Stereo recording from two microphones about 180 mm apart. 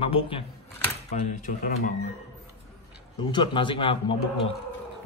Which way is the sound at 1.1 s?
45° left (ahead or behind).